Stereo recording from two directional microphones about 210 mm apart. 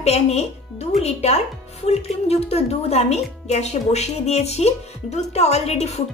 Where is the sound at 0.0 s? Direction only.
30° left (ahead or behind).